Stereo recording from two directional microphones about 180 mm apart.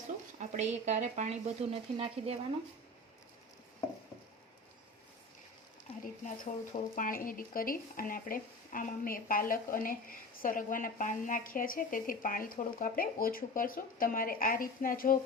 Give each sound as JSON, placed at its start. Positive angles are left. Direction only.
{"t": 0.3, "sound": "speech", "side_deg": -40}
{"t": 6.2, "sound": "speech", "side_deg": 45}